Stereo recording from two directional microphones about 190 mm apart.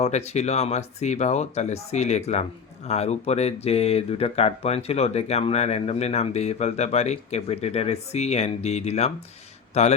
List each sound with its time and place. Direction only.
0.0 s speech: 35° left (ahead or behind)